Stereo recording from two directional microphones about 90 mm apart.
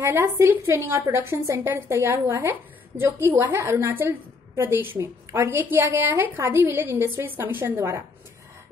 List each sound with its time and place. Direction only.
0.0 s a woman's voice: 30° right (ahead or behind)